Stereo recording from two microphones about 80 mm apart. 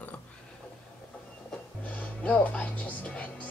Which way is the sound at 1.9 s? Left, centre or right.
Centre.